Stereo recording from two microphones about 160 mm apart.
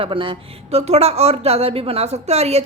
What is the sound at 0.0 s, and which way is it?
A woman's voice, 30° right (ahead or behind).